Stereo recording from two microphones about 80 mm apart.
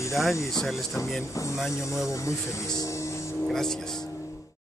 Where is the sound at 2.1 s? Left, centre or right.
Left.